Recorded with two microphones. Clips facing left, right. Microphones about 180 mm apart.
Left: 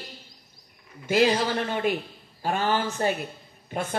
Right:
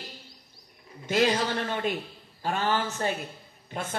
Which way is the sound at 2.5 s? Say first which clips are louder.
Left 2 dB; 35° left (ahead or behind).